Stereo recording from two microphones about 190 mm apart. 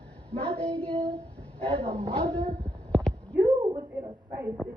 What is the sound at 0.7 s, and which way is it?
Child singing, 5° left (ahead or behind).